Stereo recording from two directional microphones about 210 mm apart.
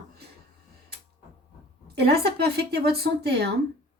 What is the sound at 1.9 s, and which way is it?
Speech, 50° right (ahead or behind).